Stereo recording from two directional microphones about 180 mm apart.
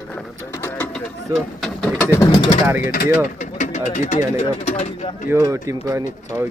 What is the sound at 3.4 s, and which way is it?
Speech, 40° left (ahead or behind).